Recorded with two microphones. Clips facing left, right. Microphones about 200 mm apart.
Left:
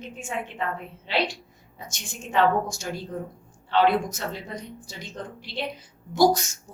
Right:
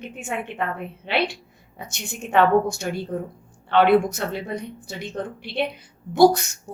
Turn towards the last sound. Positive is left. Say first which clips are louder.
# right 5 dB
turn(degrees=-60)  # may be behind; listen again after turning